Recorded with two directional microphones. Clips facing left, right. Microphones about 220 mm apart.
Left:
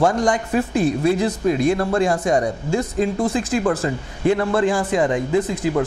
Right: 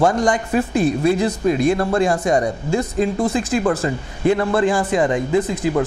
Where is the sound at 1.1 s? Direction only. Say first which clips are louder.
Right 1 dB; 15° right (ahead or behind).